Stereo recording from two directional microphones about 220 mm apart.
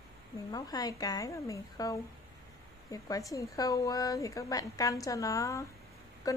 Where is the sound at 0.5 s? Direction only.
15° left (ahead or behind).